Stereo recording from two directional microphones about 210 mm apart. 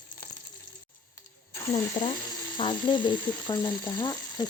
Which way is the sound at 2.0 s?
25° left (ahead or behind).